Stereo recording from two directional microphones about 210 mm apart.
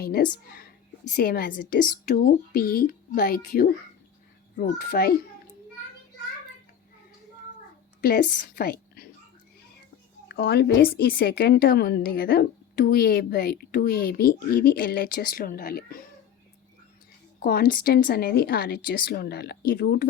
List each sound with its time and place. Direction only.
0.0 s a woman's voice: 45° left (ahead or behind)
8.0 s a woman's voice: 45° left (ahead or behind)
10.2 s speech: 50° left (ahead or behind)
17.4 s speech: 45° left (ahead or behind)